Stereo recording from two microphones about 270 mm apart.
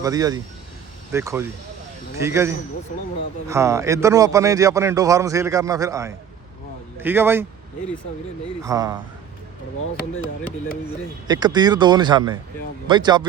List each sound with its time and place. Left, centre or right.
0.0 s a man's voice: centre
8.6 s a man's voice: centre
11.3 s a man's voice: centre